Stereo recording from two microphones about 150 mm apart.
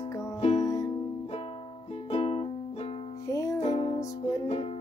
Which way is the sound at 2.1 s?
40° left (ahead or behind).